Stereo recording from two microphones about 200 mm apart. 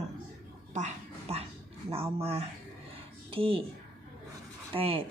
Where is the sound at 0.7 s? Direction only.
35° right (ahead or behind).